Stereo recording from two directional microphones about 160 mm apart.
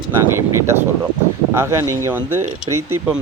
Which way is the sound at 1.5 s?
15° right (ahead or behind).